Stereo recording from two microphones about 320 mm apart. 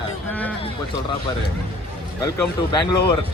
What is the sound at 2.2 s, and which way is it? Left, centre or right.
Speech, centre.